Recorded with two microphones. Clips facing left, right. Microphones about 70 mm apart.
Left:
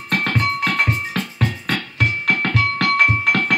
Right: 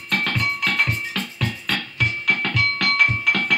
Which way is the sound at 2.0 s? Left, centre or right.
Left.